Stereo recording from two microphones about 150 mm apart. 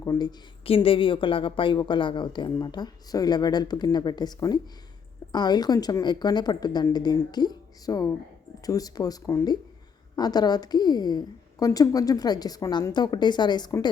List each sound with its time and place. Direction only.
0.0 s speech: 25° left (ahead or behind)